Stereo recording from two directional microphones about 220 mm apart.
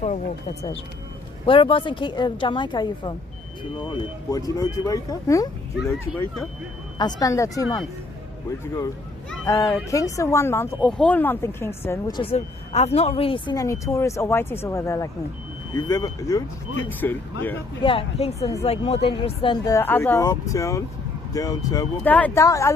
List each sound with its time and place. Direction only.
1.5 s a woman's voice: 25° left (ahead or behind)
5.8 s speech: centre (ahead or behind)
7.0 s speech: 15° left (ahead or behind)
17.8 s a woman's voice: 25° left (ahead or behind)